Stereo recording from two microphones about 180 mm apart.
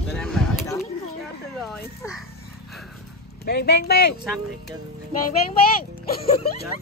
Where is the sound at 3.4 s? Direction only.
65° left (ahead or behind).